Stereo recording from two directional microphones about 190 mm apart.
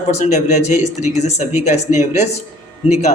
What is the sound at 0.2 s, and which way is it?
Speech, 40° left (ahead or behind).